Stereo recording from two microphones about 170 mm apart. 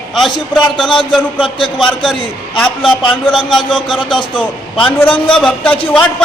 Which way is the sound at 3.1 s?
5° left (ahead or behind).